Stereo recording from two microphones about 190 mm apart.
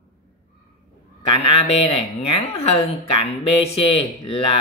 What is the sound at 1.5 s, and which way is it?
Speech, 35° left (ahead or behind).